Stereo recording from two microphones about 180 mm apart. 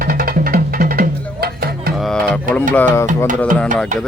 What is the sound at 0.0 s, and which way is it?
Music, 55° right (ahead or behind).